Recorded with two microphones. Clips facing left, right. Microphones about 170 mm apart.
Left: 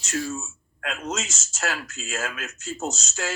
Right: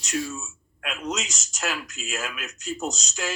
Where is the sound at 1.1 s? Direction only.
20° right (ahead or behind).